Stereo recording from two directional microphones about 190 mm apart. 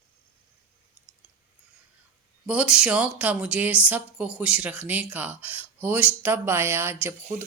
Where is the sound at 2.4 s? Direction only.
5° right (ahead or behind).